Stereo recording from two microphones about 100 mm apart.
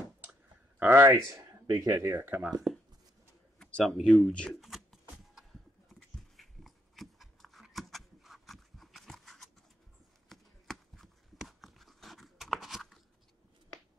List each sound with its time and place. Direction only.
0.2 s clicking: 20° right (ahead or behind)
1.7 s speech: 35° right (ahead or behind)
2.1 s speech: 15° right (ahead or behind)
3.5 s speech: centre (ahead or behind)
4.6 s a sound: centre (ahead or behind)
5.9 s dog: 5° left (ahead or behind)
10.2 s a sound: centre (ahead or behind)